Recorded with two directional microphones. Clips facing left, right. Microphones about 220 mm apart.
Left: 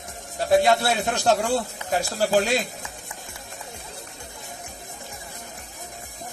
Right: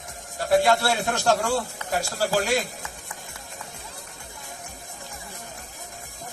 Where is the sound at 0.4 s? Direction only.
20° left (ahead or behind).